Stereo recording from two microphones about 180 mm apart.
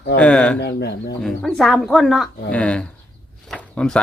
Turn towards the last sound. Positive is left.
turn(degrees=5)  # may be behind; listen again after turning